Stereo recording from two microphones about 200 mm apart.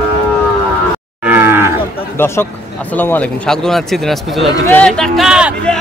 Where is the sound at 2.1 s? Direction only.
10° left (ahead or behind).